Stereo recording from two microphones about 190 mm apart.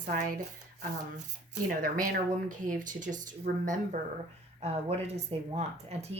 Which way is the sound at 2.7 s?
40° right (ahead or behind).